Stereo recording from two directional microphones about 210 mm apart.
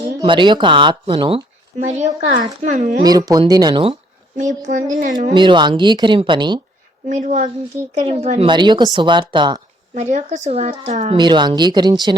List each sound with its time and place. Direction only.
0.2 s speech: 20° right (ahead or behind); by 3.0 s 40° right (ahead or behind)
3.0 s speech: 20° right (ahead or behind)
4.4 s speech: 35° right (ahead or behind)
5.3 s speech: 20° right (ahead or behind)
7.1 s speech: 35° right (ahead or behind)
11.2 s speech: 20° right (ahead or behind)